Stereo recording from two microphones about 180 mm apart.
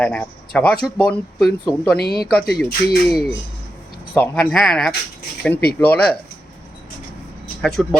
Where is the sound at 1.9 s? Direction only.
60° left (ahead or behind).